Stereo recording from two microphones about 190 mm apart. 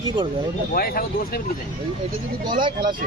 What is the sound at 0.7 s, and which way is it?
Speech, 50° left (ahead or behind).